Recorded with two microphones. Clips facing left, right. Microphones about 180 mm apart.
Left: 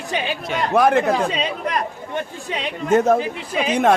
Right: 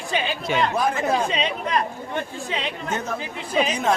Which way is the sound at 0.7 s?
60° left (ahead or behind).